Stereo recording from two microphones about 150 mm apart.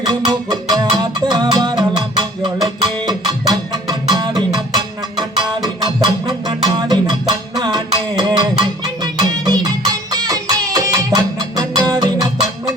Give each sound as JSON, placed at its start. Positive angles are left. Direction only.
{"t": 0.0, "sound": "music", "side_deg": -30}